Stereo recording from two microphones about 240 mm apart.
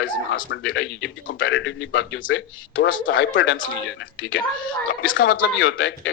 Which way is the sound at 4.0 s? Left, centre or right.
Left.